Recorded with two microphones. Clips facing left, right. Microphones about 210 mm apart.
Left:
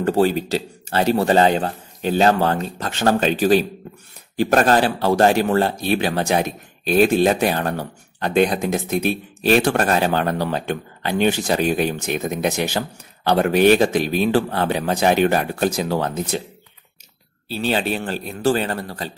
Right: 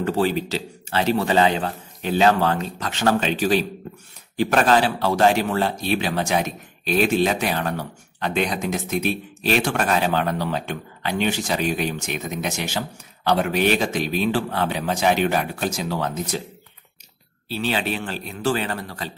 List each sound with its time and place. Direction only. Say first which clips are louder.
0.1 s speech: left 6 dB; 45° left (ahead or behind)
6.4 s speech: left 4 dB; 45° left (ahead or behind)
10.6 s speech: left 4 dB; 40° left (ahead or behind)
17.6 s speech: left 3 dB; 40° left (ahead or behind)